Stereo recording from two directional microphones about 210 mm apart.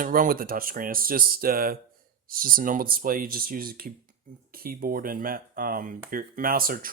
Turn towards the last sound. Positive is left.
turn(degrees=-45)  # may be behind; listen again after turning